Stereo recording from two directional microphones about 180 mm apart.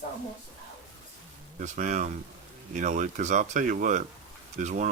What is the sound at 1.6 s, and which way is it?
Speech, 45° right (ahead or behind).